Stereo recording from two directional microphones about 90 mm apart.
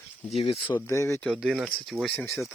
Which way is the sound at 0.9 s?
35° left (ahead or behind).